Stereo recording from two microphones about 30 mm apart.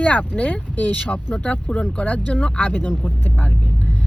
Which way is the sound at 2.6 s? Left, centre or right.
Left.